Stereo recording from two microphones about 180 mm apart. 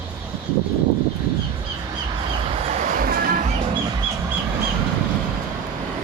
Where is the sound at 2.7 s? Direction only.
45° right (ahead or behind).